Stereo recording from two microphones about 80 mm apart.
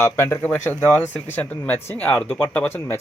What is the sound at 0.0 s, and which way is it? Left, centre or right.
Speech, left.